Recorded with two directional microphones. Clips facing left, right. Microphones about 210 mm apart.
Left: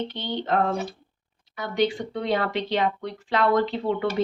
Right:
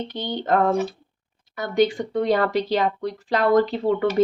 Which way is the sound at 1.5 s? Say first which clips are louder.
Right 4 dB; 45° right (ahead or behind).